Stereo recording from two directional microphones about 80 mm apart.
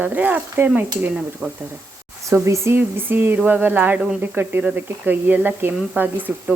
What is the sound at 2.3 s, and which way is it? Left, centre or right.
Speech, right.